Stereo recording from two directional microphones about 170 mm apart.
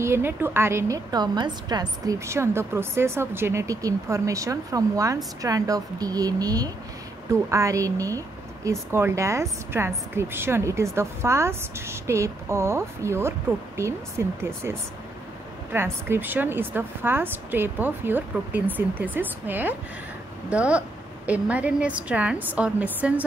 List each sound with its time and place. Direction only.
0.0 s a woman's voice: 15° right (ahead or behind)